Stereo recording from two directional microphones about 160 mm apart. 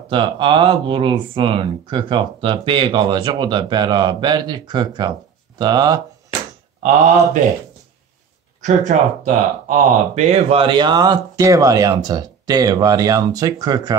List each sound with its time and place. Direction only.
0.1 s speech: 30° right (ahead or behind)
8.5 s speech: 50° right (ahead or behind); by 13.9 s 25° right (ahead or behind)